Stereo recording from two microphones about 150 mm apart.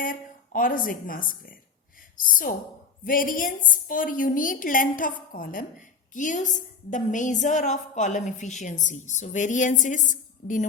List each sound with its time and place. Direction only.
0.0 s a woman's voice: 65° left (ahead or behind)
6.1 s a woman's voice: 55° left (ahead or behind)